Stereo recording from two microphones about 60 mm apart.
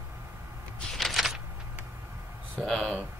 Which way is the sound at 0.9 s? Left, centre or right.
Centre.